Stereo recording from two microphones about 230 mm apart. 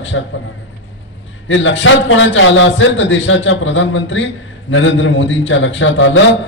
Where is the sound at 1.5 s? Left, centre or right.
Left.